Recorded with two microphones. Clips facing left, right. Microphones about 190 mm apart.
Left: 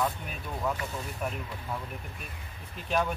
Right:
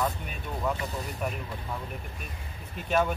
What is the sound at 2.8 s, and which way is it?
Speech, centre (ahead or behind).